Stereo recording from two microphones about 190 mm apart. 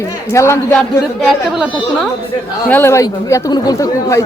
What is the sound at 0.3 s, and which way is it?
Speech, 15° left (ahead or behind).